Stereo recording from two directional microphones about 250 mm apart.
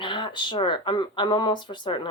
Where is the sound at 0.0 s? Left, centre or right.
Centre.